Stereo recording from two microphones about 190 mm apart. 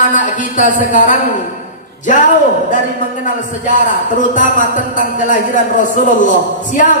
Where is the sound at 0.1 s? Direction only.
40° left (ahead or behind).